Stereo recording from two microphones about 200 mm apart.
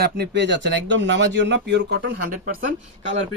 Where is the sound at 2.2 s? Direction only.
45° right (ahead or behind).